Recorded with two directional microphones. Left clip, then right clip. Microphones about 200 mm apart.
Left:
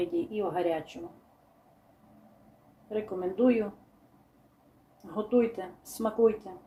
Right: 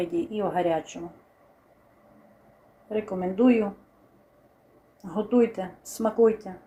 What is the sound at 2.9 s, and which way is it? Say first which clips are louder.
Speech: right 4 dB; 15° right (ahead or behind).